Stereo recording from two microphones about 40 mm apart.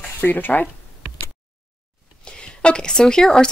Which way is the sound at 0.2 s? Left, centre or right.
Left.